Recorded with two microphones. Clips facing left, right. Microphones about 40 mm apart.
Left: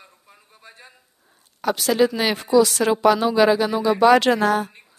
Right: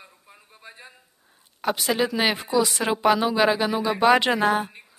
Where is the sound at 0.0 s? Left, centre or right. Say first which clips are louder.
Right 1 dB; centre.